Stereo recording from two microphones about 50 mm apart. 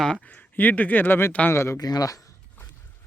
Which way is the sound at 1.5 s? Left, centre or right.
Left.